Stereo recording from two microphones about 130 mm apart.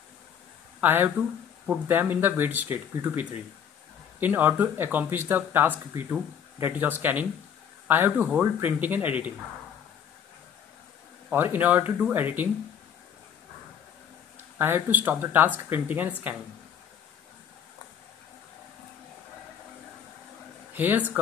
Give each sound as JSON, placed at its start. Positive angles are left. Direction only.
{"t": 0.7, "sound": "speech", "side_deg": -15}
{"t": 11.2, "sound": "speech", "side_deg": -15}
{"t": 14.6, "sound": "speech", "side_deg": -15}
{"t": 20.7, "sound": "speech", "side_deg": -15}